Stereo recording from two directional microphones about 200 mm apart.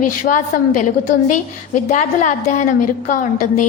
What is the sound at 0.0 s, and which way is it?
A woman's voice, 40° left (ahead or behind).